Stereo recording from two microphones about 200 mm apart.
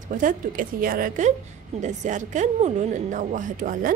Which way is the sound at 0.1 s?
40° right (ahead or behind).